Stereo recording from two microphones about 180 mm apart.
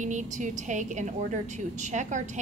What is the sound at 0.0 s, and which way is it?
A woman's voice, 45° right (ahead or behind).